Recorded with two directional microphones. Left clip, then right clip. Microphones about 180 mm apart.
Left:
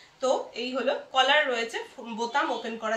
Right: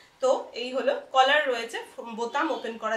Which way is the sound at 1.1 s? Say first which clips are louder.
Right 1 dB; 15° right (ahead or behind).